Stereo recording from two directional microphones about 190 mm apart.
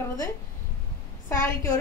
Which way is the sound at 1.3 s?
15° left (ahead or behind).